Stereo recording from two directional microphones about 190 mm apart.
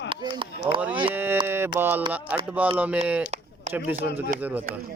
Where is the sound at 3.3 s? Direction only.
35° right (ahead or behind).